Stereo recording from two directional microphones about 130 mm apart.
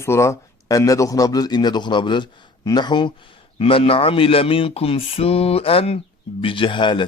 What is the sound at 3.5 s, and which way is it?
Speech, 45° left (ahead or behind).